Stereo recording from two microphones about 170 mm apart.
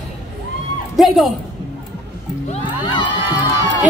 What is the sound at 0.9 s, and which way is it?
Speech, centre (ahead or behind).